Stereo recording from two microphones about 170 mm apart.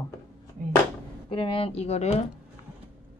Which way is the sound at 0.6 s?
50° right (ahead or behind).